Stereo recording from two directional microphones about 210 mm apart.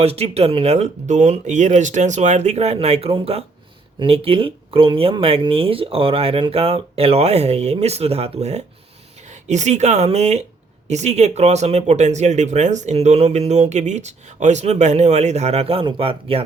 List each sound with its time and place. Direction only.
0.0 s speech: 30° right (ahead or behind)